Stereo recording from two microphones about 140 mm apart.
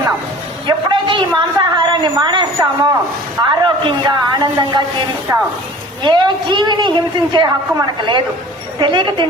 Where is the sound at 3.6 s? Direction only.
30° right (ahead or behind).